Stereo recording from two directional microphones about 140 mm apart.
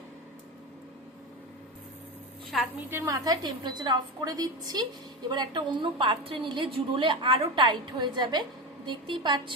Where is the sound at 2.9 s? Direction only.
25° right (ahead or behind).